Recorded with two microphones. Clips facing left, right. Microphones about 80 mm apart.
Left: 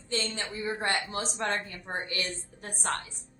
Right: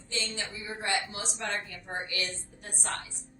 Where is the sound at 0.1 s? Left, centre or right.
Left.